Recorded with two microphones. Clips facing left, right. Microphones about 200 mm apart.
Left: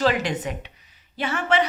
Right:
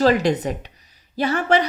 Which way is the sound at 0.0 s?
40° right (ahead or behind).